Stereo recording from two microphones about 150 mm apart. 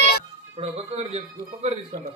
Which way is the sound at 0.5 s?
40° right (ahead or behind).